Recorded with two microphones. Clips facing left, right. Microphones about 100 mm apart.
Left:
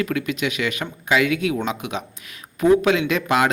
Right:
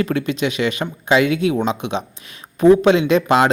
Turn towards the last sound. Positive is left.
turn(degrees=-30)  # may be behind; listen again after turning